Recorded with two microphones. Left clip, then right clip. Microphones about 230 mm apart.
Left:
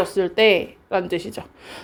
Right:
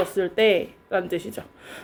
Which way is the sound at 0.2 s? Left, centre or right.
Left.